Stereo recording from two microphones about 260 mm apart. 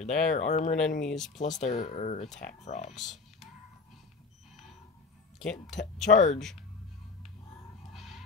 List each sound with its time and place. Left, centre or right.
0.0 s speech: left
1.0 s speech: centre
1.4 s speech: left
3.0 s music: centre
5.4 s speech: centre
6.0 s speech: left
7.9 s music: centre